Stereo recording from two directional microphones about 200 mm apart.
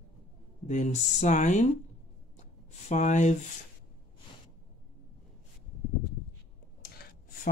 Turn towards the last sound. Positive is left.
turn(degrees=50)  # may be behind; listen again after turning